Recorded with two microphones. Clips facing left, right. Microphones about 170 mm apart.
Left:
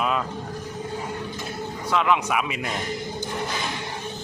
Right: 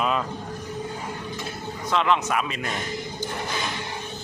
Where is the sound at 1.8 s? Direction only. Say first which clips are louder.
Even; 10° left (ahead or behind).